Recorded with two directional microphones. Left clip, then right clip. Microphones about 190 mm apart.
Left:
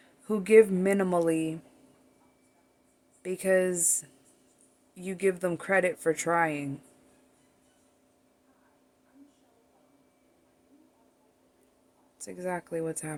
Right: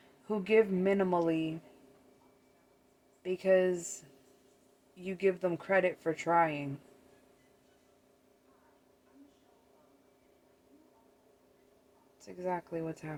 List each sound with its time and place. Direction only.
0.3 s speech: 60° left (ahead or behind)
3.2 s speech: 60° left (ahead or behind)
5.0 s speech: 60° left (ahead or behind)
12.2 s speech: 60° left (ahead or behind)